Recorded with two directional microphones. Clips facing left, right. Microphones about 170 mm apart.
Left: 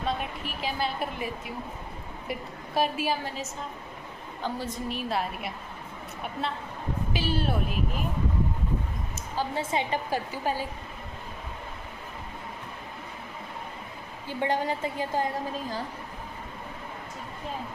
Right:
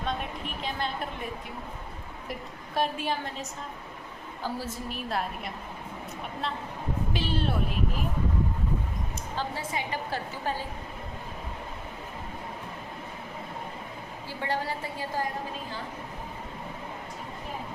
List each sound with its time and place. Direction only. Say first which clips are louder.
0.0 s a woman's voice: left 2 dB; 5° left (ahead or behind)
4.4 s a woman's voice: left 2 dB; 5° right (ahead or behind)
7.1 s a woman's voice: left 2 dB; 5° left (ahead or behind)
9.6 s a woman's voice: left 5 dB; 25° left (ahead or behind)
10.1 s a woman's voice: left 3 dB; 10° left (ahead or behind)
14.3 s a woman's voice: left 4 dB; 20° left (ahead or behind)